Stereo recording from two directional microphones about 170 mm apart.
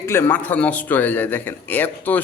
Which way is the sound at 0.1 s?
10° left (ahead or behind).